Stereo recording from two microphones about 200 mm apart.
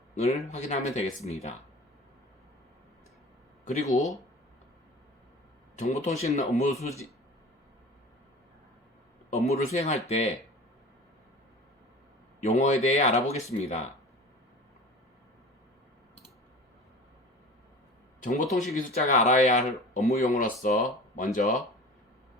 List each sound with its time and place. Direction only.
0.2 s speech: 35° left (ahead or behind)
3.6 s speech: 40° left (ahead or behind)
5.7 s speech: 35° left (ahead or behind)
9.3 s speech: 35° left (ahead or behind)
12.4 s speech: 35° left (ahead or behind)
18.2 s speech: 40° left (ahead or behind)